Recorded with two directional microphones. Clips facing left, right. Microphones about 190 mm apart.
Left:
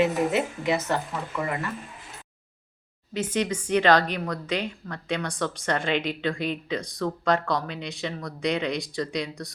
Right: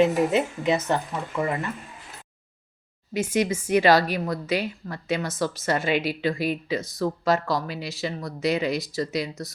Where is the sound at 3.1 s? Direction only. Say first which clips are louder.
Right 3 dB; 10° right (ahead or behind).